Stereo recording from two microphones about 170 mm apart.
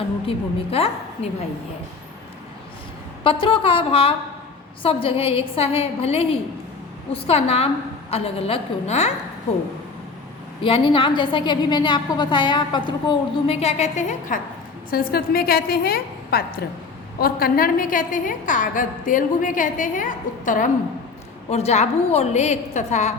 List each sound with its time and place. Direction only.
0.3 s a woman's voice: 35° left (ahead or behind)
3.2 s a woman's voice: 30° left (ahead or behind)
10.6 s a woman's voice: 30° left (ahead or behind); by 14.4 s 45° left (ahead or behind)
14.8 s a woman's voice: 60° left (ahead or behind); by 23.1 s 40° left (ahead or behind)